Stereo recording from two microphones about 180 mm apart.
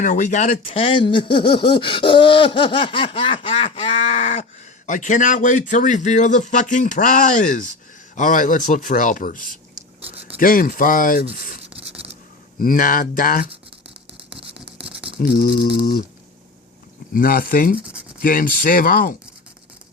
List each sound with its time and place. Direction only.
0.0 s speech: 45° left (ahead or behind)
9.7 s writing: 30° right (ahead or behind)
10.3 s speech: 50° left (ahead or behind)
11.7 s scratch: 35° right (ahead or behind)
12.5 s speech: 50° left (ahead or behind)
15.2 s speech: 50° left (ahead or behind)
15.6 s rattle: 25° left (ahead or behind)
17.2 s speech: 55° left (ahead or behind)